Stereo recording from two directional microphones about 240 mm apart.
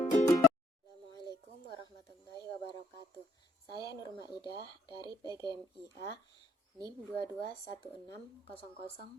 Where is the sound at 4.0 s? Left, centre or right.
Centre.